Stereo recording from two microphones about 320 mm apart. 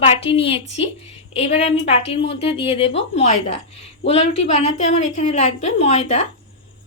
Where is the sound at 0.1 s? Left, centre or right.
Centre.